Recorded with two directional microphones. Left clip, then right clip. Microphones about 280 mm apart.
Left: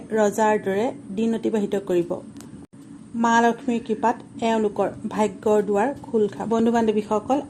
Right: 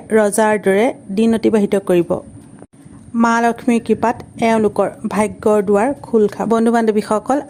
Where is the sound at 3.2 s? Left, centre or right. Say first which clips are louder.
Right 4 dB; right.